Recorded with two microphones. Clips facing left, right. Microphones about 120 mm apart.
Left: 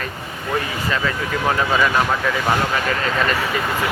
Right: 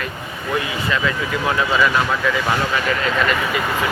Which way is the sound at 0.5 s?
40° left (ahead or behind).